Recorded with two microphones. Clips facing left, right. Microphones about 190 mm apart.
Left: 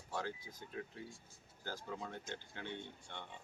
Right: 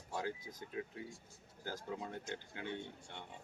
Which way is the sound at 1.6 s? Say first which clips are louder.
Right 2 dB; 20° right (ahead or behind).